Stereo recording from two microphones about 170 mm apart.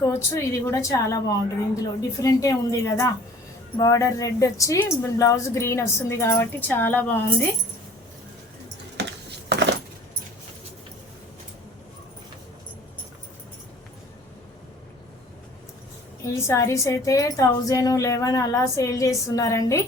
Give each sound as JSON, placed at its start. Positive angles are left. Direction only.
{"t": 0.0, "sound": "a woman's voice", "side_deg": 15}
{"t": 9.5, "sound": "keys jangling", "side_deg": -90}
{"t": 16.2, "sound": "a woman's voice", "side_deg": 15}